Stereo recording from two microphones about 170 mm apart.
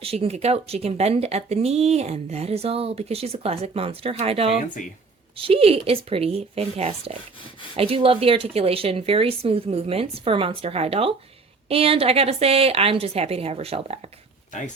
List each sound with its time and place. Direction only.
0.0 s speech: 35° right (ahead or behind)